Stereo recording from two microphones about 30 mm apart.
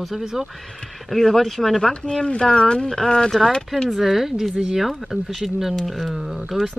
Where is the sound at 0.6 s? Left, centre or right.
Centre.